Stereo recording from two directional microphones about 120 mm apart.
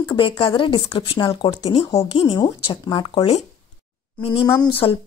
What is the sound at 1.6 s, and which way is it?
Speech, 55° left (ahead or behind).